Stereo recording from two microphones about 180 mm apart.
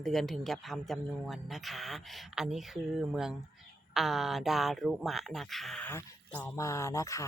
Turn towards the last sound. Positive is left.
turn(degrees=15)  # may be behind; listen again after turning